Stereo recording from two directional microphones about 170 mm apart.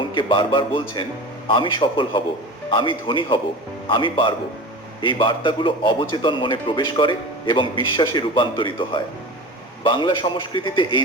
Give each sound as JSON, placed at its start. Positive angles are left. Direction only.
{"t": 0.0, "sound": "a man's voice", "side_deg": 30}